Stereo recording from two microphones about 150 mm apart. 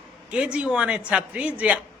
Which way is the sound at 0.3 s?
5° right (ahead or behind).